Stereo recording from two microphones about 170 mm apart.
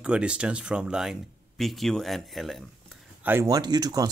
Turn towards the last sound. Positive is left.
turn(degrees=-20)  # may be behind; listen again after turning